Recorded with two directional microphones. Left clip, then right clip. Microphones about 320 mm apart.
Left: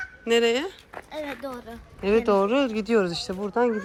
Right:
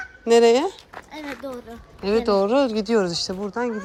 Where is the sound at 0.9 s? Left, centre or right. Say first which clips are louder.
Left 1 dB; centre.